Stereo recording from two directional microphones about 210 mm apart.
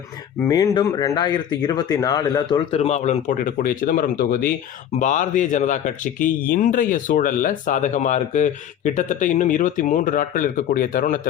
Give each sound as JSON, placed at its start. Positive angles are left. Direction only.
{"t": 0.4, "sound": "a man's voice", "side_deg": 15}